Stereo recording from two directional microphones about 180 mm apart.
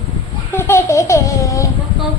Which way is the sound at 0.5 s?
15° left (ahead or behind).